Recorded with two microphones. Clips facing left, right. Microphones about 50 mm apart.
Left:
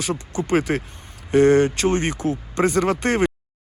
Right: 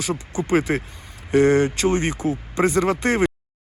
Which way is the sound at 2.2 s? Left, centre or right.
Right.